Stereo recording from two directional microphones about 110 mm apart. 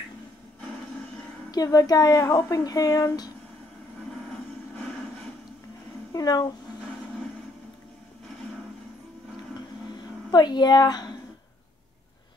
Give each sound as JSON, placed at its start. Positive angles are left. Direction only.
{"t": 1.5, "sound": "speech", "side_deg": 35}
{"t": 6.1, "sound": "speech", "side_deg": 35}
{"t": 10.3, "sound": "speech", "side_deg": 40}